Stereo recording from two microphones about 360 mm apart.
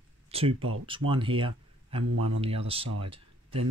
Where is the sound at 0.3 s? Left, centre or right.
Centre.